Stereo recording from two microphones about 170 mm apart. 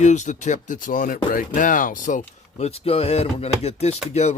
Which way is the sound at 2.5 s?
35° left (ahead or behind).